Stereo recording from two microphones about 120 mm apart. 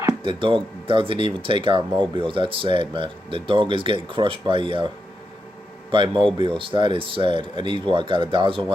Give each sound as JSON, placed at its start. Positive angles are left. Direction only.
{"t": 0.2, "sound": "speech", "side_deg": -45}
{"t": 5.9, "sound": "speech", "side_deg": -40}